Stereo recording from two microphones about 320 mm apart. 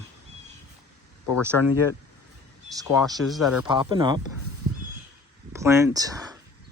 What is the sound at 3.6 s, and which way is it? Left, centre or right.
Speech, centre.